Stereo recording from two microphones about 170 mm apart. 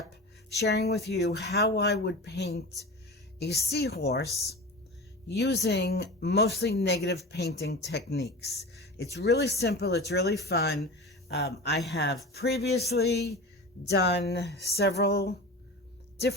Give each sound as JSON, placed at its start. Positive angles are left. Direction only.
{"t": 0.5, "sound": "a woman's voice", "side_deg": 80}
{"t": 5.3, "sound": "speech", "side_deg": 80}
{"t": 14.8, "sound": "speech", "side_deg": 70}